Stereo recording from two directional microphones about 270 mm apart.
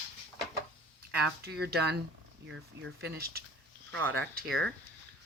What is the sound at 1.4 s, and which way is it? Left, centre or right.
Speech, right.